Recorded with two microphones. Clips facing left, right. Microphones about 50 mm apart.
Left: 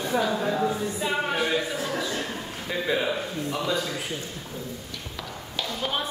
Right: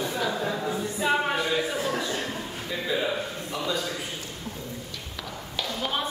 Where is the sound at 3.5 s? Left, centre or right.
Left.